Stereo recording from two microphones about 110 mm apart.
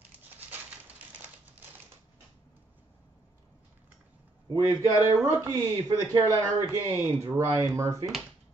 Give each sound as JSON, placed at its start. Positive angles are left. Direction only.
{"t": 0.5, "sound": "typewriter", "side_deg": -15}
{"t": 4.6, "sound": "speech", "side_deg": -30}